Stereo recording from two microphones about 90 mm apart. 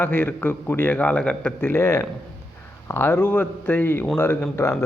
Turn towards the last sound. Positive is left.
turn(degrees=30)  # may be behind; listen again after turning